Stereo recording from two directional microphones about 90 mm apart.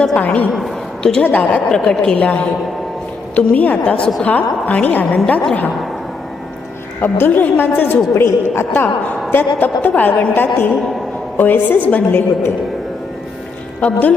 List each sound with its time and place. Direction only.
0.0 s a woman's voice: 10° left (ahead or behind)
1.2 s a woman's voice: 15° left (ahead or behind)
7.0 s a woman's voice: 20° left (ahead or behind)
8.1 s a woman's voice: 30° left (ahead or behind)
13.8 s a woman's voice: 15° left (ahead or behind)